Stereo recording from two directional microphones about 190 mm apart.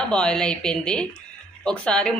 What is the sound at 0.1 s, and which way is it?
Speech, 5° left (ahead or behind).